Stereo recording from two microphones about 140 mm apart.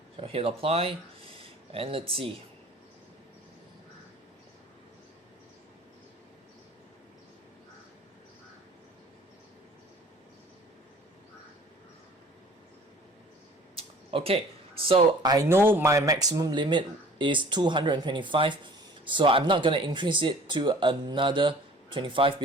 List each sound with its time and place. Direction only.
0.2 s speech: 40° right (ahead or behind)
13.7 s a sound: 40° right (ahead or behind)
15.4 s speech: 15° right (ahead or behind); by 22.4 s 40° right (ahead or behind)